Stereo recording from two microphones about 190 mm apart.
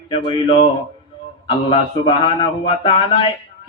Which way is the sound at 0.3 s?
25° left (ahead or behind).